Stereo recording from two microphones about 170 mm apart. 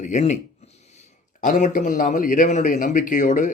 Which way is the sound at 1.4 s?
50° left (ahead or behind).